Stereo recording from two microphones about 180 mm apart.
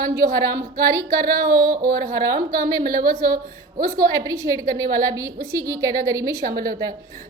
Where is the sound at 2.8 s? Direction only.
55° right (ahead or behind).